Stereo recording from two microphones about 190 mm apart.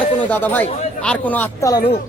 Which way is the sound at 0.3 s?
10° left (ahead or behind).